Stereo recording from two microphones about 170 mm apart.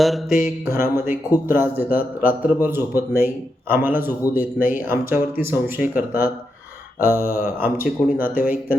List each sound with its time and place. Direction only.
0.0 s mantra: centre (ahead or behind)
0.4 s speech: 15° right (ahead or behind)
7.2 s mantra: 60° left (ahead or behind)
7.6 s speech: 10° right (ahead or behind)